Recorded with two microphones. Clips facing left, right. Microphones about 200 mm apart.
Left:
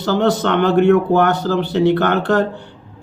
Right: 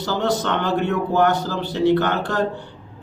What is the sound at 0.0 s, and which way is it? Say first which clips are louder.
Speech: left 5 dB; 60° left (ahead or behind).